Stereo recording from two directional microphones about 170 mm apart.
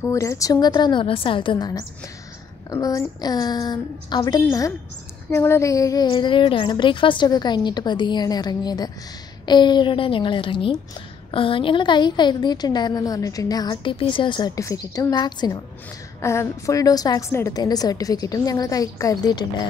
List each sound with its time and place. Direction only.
0.0 s a woman's voice: 15° left (ahead or behind)